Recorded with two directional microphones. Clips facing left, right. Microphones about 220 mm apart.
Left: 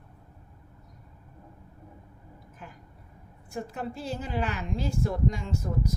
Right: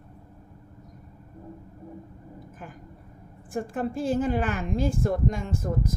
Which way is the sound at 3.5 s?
50° right (ahead or behind).